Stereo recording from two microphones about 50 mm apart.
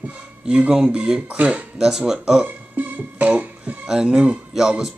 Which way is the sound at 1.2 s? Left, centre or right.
Right.